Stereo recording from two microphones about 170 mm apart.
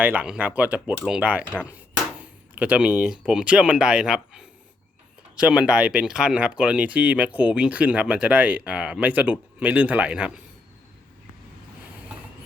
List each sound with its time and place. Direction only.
0.0 s speech: 10° right (ahead or behind)